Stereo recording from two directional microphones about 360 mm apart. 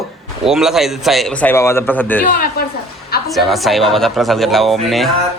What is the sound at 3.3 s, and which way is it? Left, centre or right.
Speech, centre.